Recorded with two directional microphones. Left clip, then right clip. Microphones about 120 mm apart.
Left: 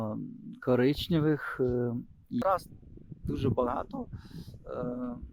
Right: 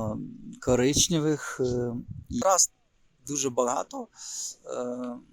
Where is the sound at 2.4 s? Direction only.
25° right (ahead or behind).